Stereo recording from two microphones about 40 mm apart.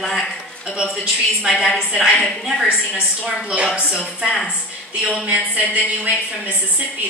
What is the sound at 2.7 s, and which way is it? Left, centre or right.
A woman's voice, centre.